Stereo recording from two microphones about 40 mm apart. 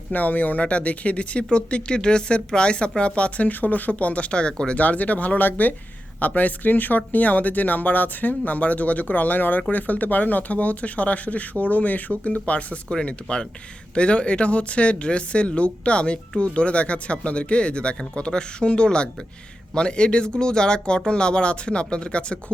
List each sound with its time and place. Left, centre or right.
0.1 s speech: left
4.8 s speech: left
12.9 s speech: left